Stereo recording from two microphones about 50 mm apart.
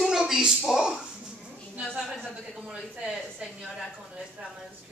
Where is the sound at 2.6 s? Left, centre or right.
Right.